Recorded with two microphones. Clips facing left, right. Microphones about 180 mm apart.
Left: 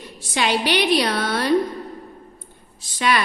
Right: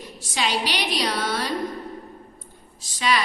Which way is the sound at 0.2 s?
60° left (ahead or behind).